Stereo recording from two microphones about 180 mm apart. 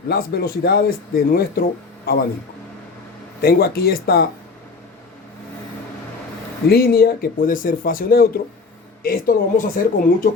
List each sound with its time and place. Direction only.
0.1 s speech: 60° left (ahead or behind)
3.4 s speech: 60° left (ahead or behind)
6.7 s speech: 60° left (ahead or behind)